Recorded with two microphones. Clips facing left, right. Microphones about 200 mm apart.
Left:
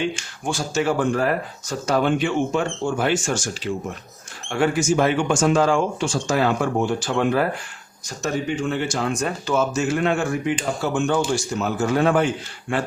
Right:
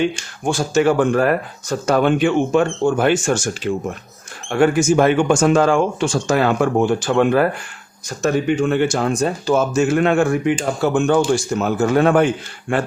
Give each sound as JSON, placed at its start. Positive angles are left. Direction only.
{"t": 0.4, "sound": "speech", "side_deg": -50}
{"t": 9.1, "sound": "speech", "side_deg": -35}
{"t": 9.7, "sound": "speech", "side_deg": -55}